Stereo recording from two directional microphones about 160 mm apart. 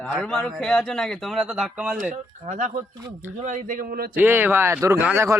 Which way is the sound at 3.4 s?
55° right (ahead or behind).